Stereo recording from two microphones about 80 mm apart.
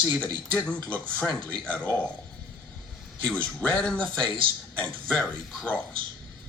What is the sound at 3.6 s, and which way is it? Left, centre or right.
Speech, centre.